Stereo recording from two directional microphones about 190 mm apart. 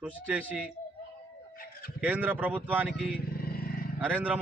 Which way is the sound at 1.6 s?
50° left (ahead or behind).